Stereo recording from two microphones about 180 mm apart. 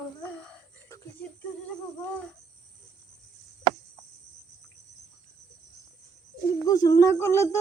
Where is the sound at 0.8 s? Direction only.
15° left (ahead or behind).